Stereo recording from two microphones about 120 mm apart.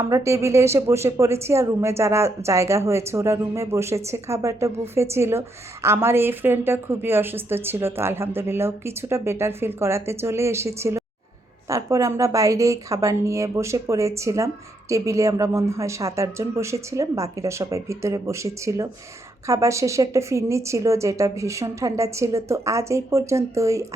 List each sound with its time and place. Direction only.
0.0 s a woman's voice: 25° right (ahead or behind)